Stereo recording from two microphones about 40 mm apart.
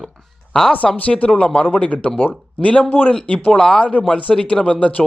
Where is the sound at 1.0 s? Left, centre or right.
Left.